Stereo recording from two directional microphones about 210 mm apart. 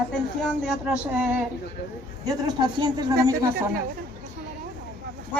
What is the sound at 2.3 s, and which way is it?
A man's voice, 20° right (ahead or behind).